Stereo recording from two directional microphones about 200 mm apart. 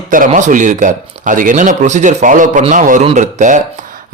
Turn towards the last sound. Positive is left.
turn(degrees=-40)  # may be behind; listen again after turning